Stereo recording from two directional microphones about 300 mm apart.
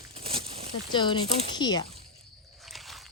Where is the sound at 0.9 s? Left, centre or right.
Centre.